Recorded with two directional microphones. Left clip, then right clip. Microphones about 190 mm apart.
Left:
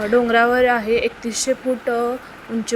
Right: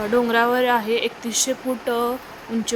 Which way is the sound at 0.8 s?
40° right (ahead or behind).